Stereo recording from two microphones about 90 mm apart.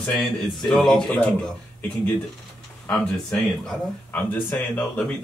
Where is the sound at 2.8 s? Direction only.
10° left (ahead or behind).